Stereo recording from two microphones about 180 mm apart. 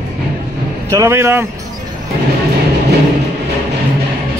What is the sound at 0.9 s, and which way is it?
Speech, 15° right (ahead or behind).